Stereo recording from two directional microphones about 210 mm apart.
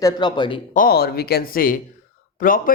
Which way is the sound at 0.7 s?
45° left (ahead or behind).